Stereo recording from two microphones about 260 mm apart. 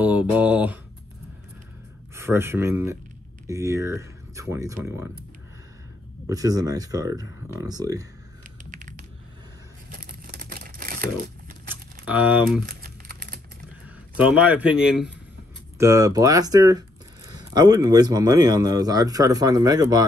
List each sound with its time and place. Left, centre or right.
0.0 s mantra: centre
2.1 s a man's voice: centre
6.2 s a man's voice: centre
8.6 s typing: right
9.8 s crumpling: right
11.7 s typing: centre
12.6 s typing: right
13.8 s a man's voice: centre